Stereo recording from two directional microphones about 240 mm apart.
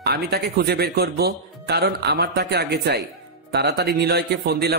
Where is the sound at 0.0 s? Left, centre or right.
Right.